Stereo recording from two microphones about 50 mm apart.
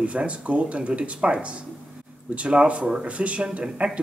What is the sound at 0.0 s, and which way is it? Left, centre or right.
Speech, right.